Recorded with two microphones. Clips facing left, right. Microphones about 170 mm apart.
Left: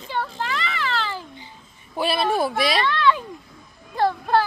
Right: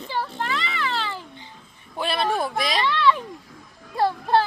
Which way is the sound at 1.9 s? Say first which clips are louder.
Left 2 dB; 5° left (ahead or behind).